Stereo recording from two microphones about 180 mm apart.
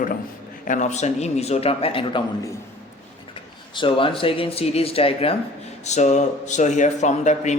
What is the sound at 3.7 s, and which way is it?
Speech, 30° left (ahead or behind).